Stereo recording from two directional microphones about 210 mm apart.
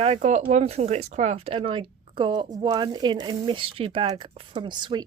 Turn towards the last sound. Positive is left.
turn(degrees=-20)  # may be behind; listen again after turning